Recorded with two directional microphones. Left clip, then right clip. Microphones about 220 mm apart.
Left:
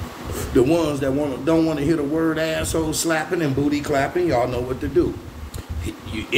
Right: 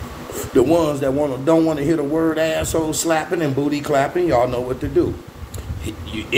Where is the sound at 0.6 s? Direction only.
10° left (ahead or behind).